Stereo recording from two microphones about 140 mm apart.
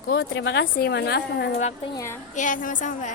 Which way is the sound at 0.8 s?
90° left.